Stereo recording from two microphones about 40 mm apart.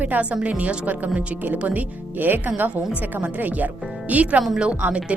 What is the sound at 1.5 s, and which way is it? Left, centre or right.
A woman's voice, right.